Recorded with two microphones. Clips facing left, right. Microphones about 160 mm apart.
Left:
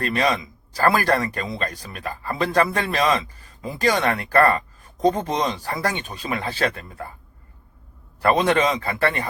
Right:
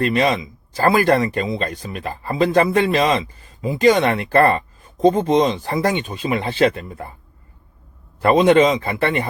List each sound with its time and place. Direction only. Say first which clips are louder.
0.0 s speech: right 4 dB; 25° right (ahead or behind)
8.2 s speech: right 6 dB; 20° right (ahead or behind)